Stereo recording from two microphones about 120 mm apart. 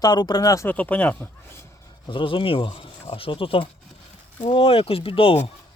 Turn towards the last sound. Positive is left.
turn(degrees=50)  # may be behind; listen again after turning